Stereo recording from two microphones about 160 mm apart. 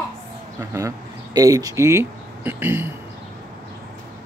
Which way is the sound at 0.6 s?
20° right (ahead or behind).